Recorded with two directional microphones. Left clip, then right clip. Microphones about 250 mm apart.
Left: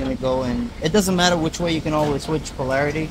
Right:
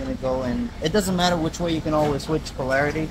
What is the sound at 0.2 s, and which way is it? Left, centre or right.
Speech, left.